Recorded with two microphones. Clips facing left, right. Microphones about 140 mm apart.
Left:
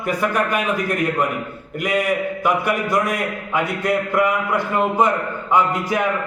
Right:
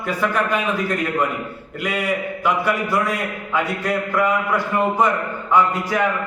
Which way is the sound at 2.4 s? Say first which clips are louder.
Even; 15° left (ahead or behind).